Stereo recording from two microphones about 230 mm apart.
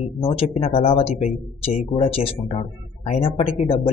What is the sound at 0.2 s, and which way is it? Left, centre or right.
Speech, left.